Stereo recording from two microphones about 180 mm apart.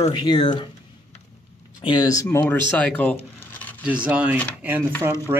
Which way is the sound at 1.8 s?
25° left (ahead or behind).